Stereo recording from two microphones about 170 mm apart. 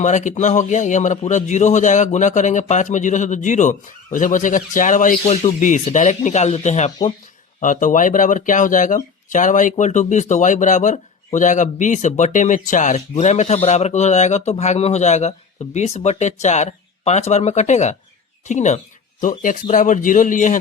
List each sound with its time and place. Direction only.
0.0 s speech: 45° left (ahead or behind)